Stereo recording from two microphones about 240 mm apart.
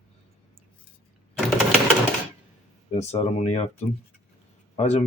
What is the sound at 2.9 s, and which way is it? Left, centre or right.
Speech, left.